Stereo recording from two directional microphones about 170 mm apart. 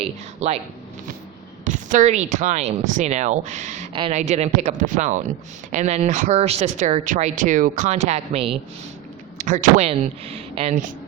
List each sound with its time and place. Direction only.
0.0 s speech: 35° right (ahead or behind)
1.6 s a woman's voice: 50° right (ahead or behind)
9.4 s a woman's voice: 50° right (ahead or behind)